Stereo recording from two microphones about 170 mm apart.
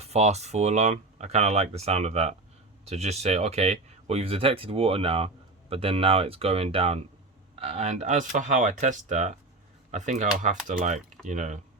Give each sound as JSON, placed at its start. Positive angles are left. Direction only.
{"t": 0.0, "sound": "speech", "side_deg": -40}